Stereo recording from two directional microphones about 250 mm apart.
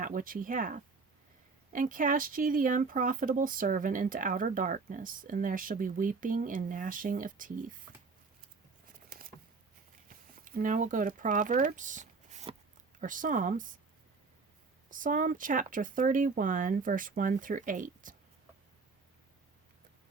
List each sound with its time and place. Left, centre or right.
0.0 s speech: right
10.3 s speech: right
14.8 s speech: right